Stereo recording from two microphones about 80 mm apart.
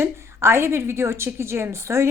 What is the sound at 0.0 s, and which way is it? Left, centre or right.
A woman's voice, right.